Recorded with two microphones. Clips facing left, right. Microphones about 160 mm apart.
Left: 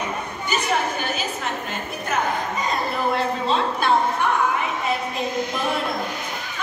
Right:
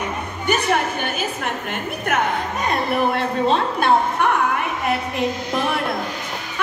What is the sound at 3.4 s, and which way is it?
Speech, 55° right (ahead or behind).